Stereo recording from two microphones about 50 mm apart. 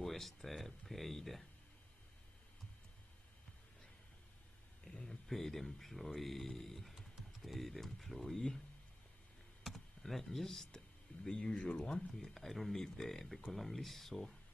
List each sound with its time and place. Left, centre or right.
0.0 s speech: centre
5.0 s speech: centre
9.6 s computer keyboard: centre
11.2 s speech: centre
12.1 s speech: centre